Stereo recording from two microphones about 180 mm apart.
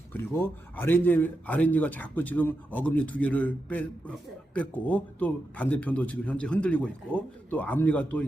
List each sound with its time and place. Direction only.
0.1 s a man's voice: 10° left (ahead or behind)